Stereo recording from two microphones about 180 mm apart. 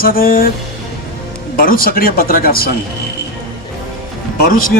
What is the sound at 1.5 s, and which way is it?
Speech, 50° left (ahead or behind).